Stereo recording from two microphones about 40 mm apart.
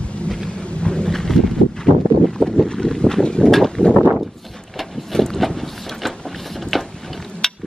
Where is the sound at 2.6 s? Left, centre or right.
Centre.